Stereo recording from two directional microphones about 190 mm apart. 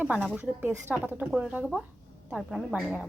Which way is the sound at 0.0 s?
5° right (ahead or behind).